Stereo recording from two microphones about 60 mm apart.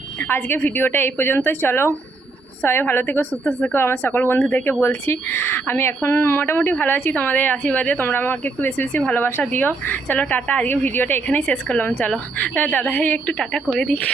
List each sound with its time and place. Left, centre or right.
0.3 s a woman's voice: left
3.4 s speech: left
3.8 s a woman's voice: left
6.6 s speech: left
6.8 s a woman's voice: left
11.3 s speech: left
13.4 s speech: centre